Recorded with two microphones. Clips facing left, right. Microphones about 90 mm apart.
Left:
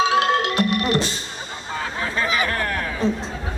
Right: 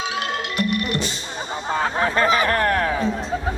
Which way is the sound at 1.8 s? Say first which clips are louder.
Right 5 dB; 45° right (ahead or behind).